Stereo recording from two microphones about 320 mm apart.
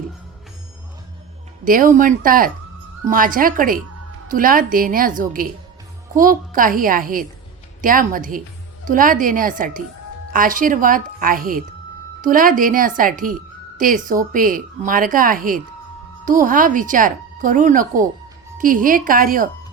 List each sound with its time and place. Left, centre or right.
1.6 s speech: right